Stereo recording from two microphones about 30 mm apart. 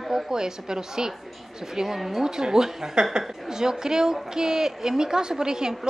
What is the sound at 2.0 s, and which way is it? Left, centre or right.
Speech, centre.